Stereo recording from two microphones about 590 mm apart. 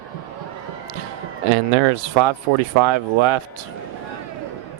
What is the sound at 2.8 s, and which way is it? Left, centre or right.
Speech, right.